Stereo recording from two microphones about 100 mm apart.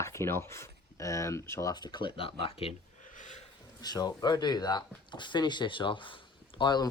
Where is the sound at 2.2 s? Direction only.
70° left (ahead or behind).